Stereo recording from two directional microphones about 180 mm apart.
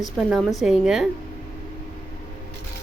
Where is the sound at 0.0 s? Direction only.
Centre (ahead or behind).